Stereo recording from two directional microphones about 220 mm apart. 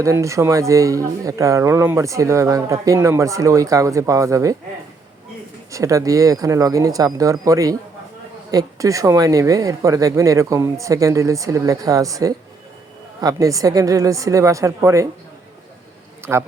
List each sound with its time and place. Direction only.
0.0 s speech: 15° right (ahead or behind)
5.7 s speech: 15° right (ahead or behind)
16.3 s speech: 5° right (ahead or behind)